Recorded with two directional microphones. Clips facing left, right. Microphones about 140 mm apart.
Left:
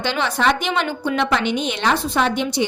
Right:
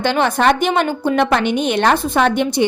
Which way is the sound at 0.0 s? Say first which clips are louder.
Right 5 dB; 50° right (ahead or behind).